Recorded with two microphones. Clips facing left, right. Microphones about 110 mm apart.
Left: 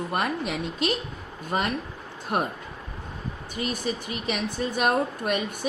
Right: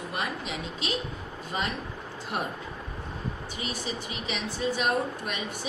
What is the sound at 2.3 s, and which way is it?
Speech, 50° left (ahead or behind).